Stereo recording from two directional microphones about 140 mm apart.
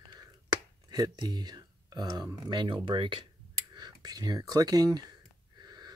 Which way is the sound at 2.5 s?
30° right (ahead or behind).